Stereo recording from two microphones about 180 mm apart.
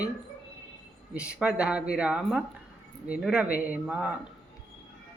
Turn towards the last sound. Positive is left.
turn(degrees=-5)  # may be behind; listen again after turning